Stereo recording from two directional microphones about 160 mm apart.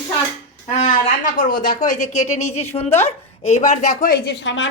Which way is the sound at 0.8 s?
55° left (ahead or behind).